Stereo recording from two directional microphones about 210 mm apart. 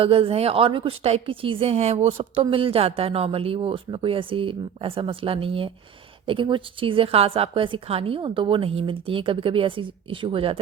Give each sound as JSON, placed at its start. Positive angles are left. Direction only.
{"t": 0.0, "sound": "a woman's voice", "side_deg": -25}